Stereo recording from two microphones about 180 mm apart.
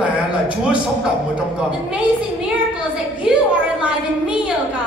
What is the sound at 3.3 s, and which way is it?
A woman's voice, 5° right (ahead or behind).